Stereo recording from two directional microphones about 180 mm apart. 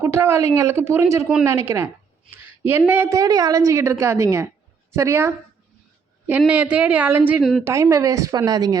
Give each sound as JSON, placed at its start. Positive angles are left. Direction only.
{"t": 0.0, "sound": "a woman's voice", "side_deg": -15}
{"t": 7.6, "sound": "speech", "side_deg": -15}